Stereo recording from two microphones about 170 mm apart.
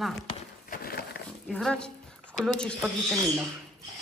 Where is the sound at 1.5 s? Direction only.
5° left (ahead or behind).